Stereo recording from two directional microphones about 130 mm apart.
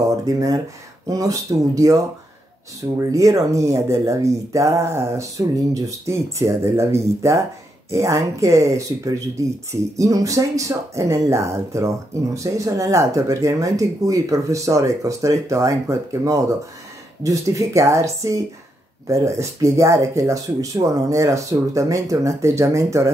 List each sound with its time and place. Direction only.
0.1 s speech: 25° right (ahead or behind)